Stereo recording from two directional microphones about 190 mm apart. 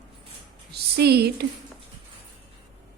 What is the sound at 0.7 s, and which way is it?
Speech, 60° right (ahead or behind).